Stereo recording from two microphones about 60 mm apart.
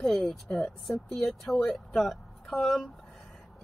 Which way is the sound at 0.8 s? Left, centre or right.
Centre.